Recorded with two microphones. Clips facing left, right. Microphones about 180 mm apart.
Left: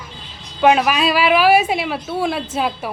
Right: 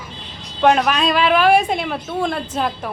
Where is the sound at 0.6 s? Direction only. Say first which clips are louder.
Left 1 dB; 5° left (ahead or behind).